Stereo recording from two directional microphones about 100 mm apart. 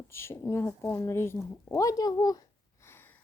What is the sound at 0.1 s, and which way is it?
Speech, 25° left (ahead or behind).